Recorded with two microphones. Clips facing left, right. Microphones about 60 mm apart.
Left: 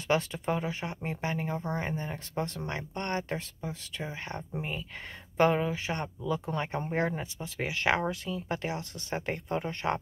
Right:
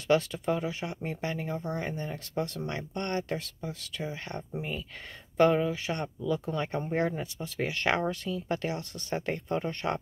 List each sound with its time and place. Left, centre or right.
0.1 s speech: left